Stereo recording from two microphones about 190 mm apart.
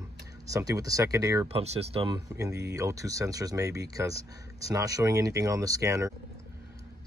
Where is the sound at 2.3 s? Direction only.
15° right (ahead or behind).